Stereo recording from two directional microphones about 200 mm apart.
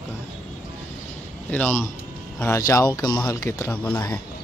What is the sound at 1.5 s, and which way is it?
Speech, 10° left (ahead or behind).